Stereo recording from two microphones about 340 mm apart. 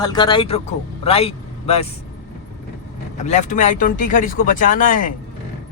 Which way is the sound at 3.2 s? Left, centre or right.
Left.